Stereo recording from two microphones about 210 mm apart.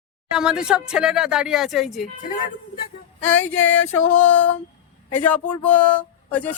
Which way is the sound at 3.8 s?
80° left.